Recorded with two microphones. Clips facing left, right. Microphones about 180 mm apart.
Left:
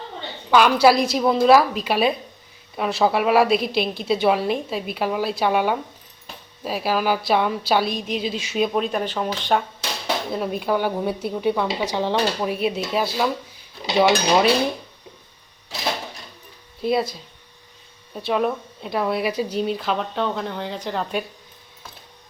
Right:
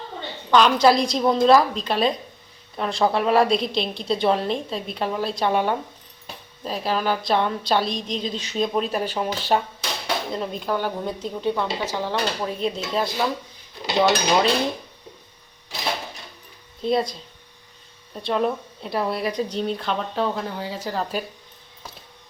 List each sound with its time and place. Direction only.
0.5 s speech: 10° left (ahead or behind)
10.3 s speech: 5° left (ahead or behind)
12.5 s speech: 10° left (ahead or behind)
16.8 s speech: 5° left (ahead or behind)